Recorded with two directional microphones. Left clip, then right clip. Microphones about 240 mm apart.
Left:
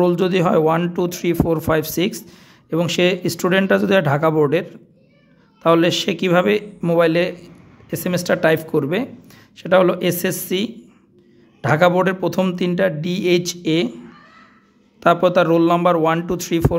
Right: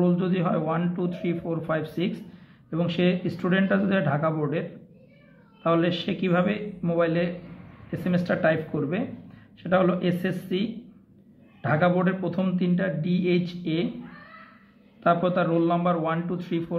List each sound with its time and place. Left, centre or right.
0.0 s speech: left
15.0 s speech: left